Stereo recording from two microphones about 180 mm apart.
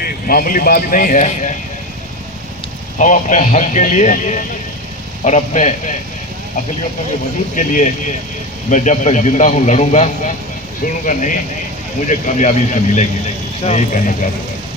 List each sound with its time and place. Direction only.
0.0 s speech: 55° left (ahead or behind)
3.0 s a man's voice: 45° left (ahead or behind)
7.5 s a man's voice: 45° left (ahead or behind)